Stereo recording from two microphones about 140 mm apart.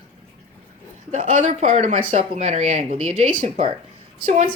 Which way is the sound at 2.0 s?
40° right (ahead or behind).